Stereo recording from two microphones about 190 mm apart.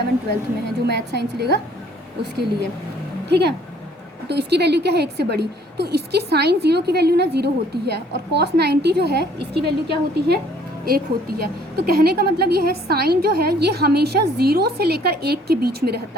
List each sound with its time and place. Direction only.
0.9 s a woman's voice: 60° right (ahead or behind)
3.2 s a woman's voice: 60° right (ahead or behind)